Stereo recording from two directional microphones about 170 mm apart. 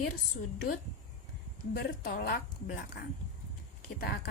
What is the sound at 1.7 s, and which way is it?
Speech, 65° left (ahead or behind).